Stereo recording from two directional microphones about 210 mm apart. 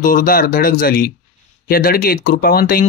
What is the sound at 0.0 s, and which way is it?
Speech, 40° left (ahead or behind).